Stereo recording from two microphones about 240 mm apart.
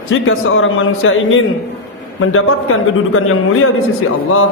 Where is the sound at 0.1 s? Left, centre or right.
Left.